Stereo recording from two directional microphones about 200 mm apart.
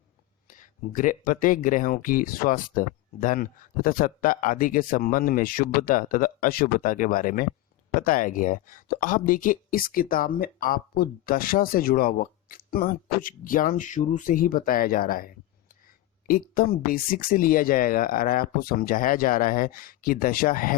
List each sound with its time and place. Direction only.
0.4 s speech: 40° left (ahead or behind)